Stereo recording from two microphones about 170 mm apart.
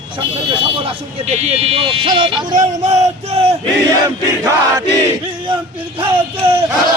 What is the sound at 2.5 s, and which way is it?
Speech, 45° right (ahead or behind).